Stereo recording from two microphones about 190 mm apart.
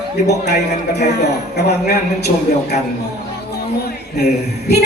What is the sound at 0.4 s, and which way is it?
A man's voice, 60° left (ahead or behind).